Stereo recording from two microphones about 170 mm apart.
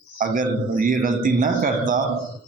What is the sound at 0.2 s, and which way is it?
A man's voice, 50° right (ahead or behind).